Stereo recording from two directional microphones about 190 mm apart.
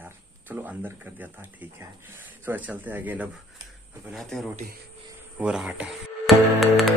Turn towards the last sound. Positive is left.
turn(degrees=0)  # may be behind; listen again after turning